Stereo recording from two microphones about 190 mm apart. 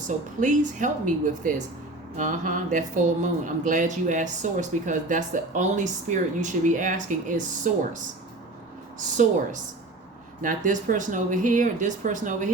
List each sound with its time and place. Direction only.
0.3 s speech: 40° right (ahead or behind)
10.4 s speech: 45° right (ahead or behind)